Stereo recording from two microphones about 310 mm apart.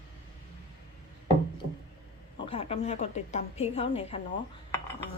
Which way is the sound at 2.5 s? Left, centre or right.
Centre.